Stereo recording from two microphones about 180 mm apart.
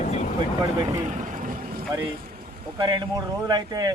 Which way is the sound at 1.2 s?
45° right (ahead or behind).